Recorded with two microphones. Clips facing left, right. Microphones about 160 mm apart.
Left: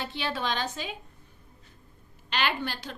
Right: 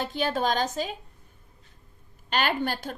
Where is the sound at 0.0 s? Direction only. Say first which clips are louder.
Right 5 dB; 45° right (ahead or behind).